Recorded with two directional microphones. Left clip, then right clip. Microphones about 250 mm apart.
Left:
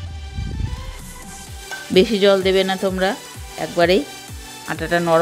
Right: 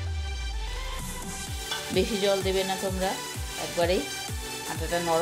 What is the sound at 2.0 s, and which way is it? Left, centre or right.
Speech, left.